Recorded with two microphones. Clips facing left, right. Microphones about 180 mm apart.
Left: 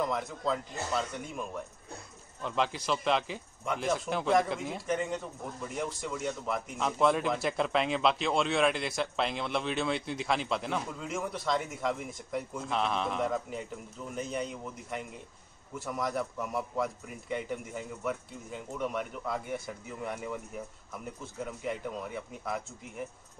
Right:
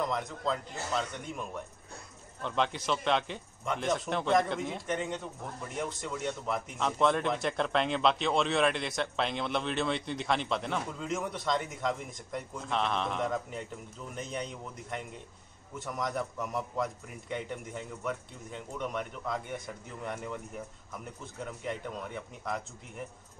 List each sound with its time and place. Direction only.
0.0 s speech: 5° left (ahead or behind)